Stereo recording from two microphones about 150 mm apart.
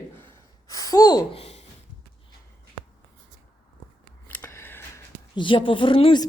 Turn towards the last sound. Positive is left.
turn(degrees=35)  # may be behind; listen again after turning